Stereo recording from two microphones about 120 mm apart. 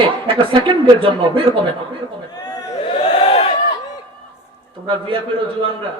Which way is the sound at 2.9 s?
50° left (ahead or behind).